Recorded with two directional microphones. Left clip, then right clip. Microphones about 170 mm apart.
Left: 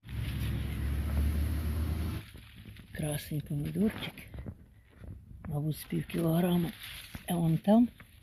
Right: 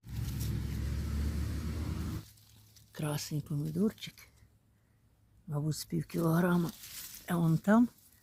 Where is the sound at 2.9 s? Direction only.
Centre (ahead or behind).